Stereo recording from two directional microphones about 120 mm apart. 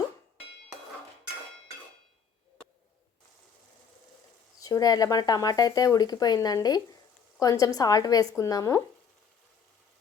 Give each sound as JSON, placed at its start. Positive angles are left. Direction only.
{"t": 4.6, "sound": "speech", "side_deg": 30}